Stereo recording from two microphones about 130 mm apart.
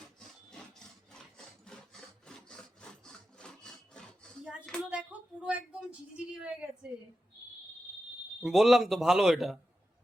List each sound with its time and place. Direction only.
1.6 s wood: 5° left (ahead or behind)
4.8 s a sound: 10° right (ahead or behind)
5.5 s a woman's voice: 10° right (ahead or behind)
8.4 s a man's voice: centre (ahead or behind)